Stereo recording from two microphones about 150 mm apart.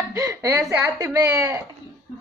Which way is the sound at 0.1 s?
20° right (ahead or behind).